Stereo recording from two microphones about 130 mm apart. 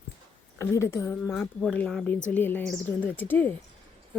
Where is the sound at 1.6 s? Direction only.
5° left (ahead or behind).